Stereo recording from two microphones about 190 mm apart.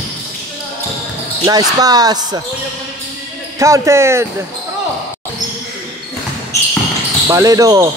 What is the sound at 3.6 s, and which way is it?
Speech, 15° right (ahead or behind).